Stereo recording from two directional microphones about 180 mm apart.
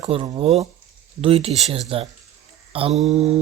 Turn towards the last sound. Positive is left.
turn(degrees=-35)  # may be behind; listen again after turning